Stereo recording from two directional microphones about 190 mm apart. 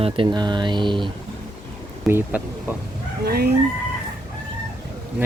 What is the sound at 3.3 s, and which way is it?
Speech, 55° right (ahead or behind).